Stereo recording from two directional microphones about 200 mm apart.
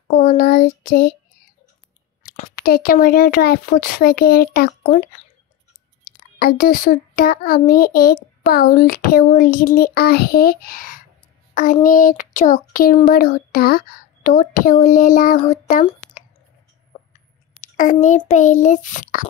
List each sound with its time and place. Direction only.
0.2 s speech: 40° left (ahead or behind)
2.2 s speech: 45° left (ahead or behind)
6.1 s a sound: 50° left (ahead or behind)
6.4 s speech: 45° left (ahead or behind)
17.6 s a child's voice: 40° left (ahead or behind)